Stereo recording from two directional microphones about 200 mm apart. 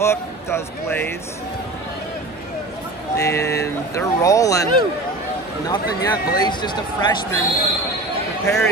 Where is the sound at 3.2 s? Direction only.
15° left (ahead or behind).